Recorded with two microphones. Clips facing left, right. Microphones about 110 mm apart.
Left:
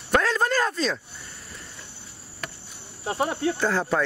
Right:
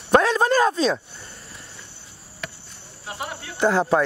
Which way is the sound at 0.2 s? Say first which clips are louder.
Right 5 dB; 20° right (ahead or behind).